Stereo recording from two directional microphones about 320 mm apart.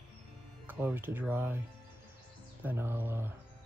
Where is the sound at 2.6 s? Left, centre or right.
Centre.